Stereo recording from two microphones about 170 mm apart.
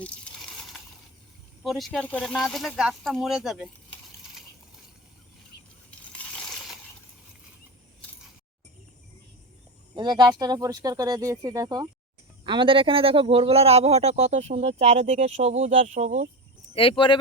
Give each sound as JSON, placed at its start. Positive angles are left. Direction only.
{"t": 0.0, "sound": "a sound", "side_deg": 5}
{"t": 1.6, "sound": "speech", "side_deg": 0}
{"t": 6.1, "sound": "crushing", "side_deg": 5}
{"t": 9.9, "sound": "a man's voice", "side_deg": -25}
{"t": 16.7, "sound": "speech", "side_deg": 30}